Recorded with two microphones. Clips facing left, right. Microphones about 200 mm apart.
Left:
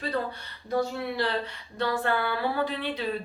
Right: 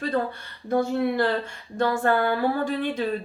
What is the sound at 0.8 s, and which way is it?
Speech, 50° right (ahead or behind).